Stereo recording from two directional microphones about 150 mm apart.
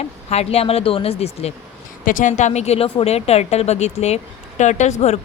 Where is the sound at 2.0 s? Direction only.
60° left (ahead or behind).